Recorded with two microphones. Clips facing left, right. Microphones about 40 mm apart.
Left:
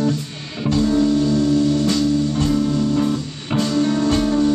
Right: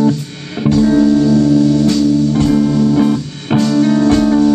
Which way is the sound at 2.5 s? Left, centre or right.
Right.